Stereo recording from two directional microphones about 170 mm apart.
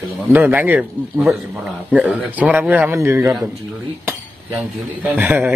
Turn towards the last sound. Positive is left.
turn(degrees=-10)  # may be behind; listen again after turning